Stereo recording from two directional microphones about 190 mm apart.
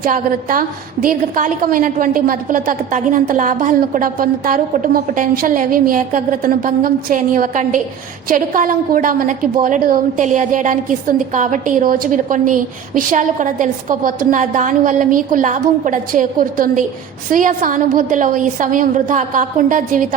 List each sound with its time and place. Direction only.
0.0 s a woman's voice: 45° right (ahead or behind)